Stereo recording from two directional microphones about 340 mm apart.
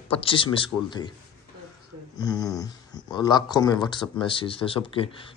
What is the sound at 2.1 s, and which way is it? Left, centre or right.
Speech, centre.